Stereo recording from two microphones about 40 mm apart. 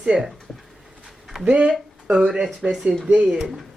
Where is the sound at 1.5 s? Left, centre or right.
Right.